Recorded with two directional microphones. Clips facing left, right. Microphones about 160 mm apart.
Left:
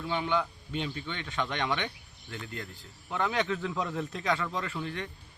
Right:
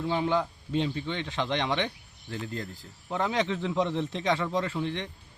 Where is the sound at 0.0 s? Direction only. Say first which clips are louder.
Right 3 dB; 30° right (ahead or behind).